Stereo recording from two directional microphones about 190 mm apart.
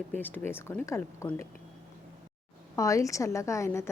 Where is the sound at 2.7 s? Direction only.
15° left (ahead or behind).